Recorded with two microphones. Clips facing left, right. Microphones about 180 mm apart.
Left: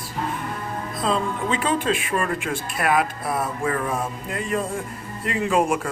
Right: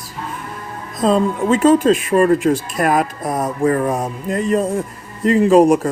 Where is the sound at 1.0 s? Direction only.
45° right (ahead or behind).